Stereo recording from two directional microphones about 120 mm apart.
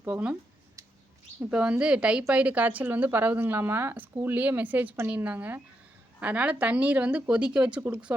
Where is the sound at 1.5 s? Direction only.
10° right (ahead or behind).